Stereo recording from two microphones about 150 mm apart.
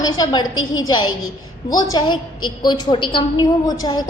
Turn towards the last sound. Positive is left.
turn(degrees=30)  # may be behind; listen again after turning